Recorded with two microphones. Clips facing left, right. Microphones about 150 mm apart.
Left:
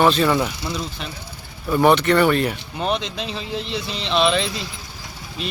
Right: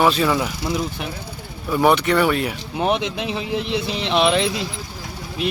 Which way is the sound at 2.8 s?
15° right (ahead or behind).